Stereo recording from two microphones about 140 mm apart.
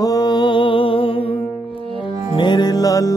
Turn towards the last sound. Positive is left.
turn(degrees=25)  # may be behind; listen again after turning